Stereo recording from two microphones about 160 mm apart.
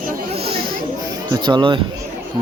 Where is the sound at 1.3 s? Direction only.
25° right (ahead or behind).